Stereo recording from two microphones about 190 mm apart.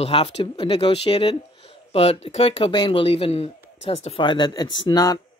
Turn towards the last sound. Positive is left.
turn(degrees=20)  # may be behind; listen again after turning